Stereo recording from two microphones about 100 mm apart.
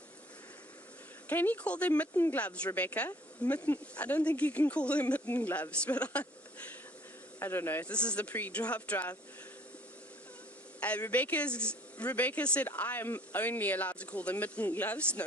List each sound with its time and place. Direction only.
1.3 s speech: 15° left (ahead or behind)
7.3 s speech: 25° left (ahead or behind)
10.8 s a sound: 15° left (ahead or behind)
11.0 s speech: 15° left (ahead or behind)